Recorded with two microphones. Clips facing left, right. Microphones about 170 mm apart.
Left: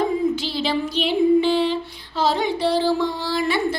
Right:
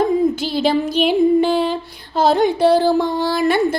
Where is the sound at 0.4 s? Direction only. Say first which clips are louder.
Right 6 dB; 50° right (ahead or behind).